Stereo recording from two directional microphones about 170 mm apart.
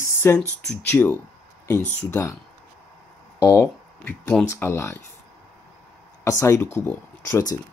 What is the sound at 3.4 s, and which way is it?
Speech, 20° left (ahead or behind).